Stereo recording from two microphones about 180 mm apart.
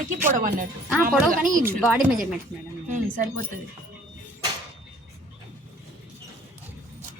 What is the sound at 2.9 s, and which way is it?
Speech, 50° right (ahead or behind).